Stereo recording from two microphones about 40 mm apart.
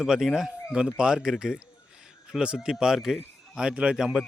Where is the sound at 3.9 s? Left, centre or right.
Centre.